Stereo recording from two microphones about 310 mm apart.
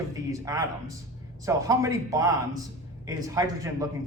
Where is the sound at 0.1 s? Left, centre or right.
Centre.